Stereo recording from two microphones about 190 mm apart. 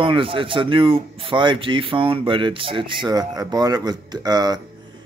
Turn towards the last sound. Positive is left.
turn(degrees=-20)  # may be behind; listen again after turning